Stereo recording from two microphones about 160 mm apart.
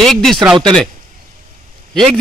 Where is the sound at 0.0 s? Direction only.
Centre (ahead or behind).